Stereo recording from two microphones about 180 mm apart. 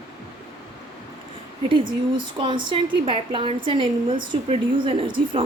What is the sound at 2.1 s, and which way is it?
A woman's voice, 25° right (ahead or behind).